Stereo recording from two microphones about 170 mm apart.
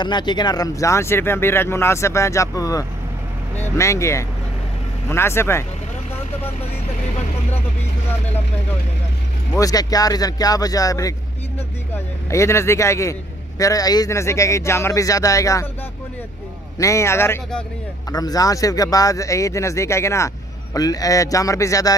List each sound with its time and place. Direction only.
0.0 s speech: 25° left (ahead or behind)
9.6 s speech: 20° left (ahead or behind)
12.3 s speech: 15° left (ahead or behind)
16.7 s speech: 20° left (ahead or behind)